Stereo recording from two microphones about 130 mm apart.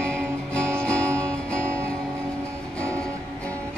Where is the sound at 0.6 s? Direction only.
10° left (ahead or behind).